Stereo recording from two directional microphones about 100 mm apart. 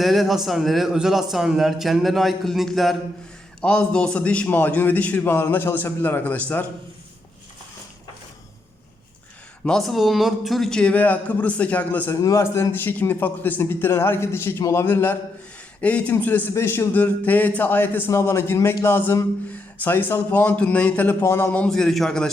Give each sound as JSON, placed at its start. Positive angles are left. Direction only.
{"t": 0.0, "sound": "a man's voice", "side_deg": 0}
{"t": 9.6, "sound": "a man's voice", "side_deg": 5}
{"t": 12.1, "sound": "a man's voice", "side_deg": 30}
{"t": 12.7, "sound": "a man's voice", "side_deg": 20}
{"t": 21.5, "sound": "a man's voice", "side_deg": 10}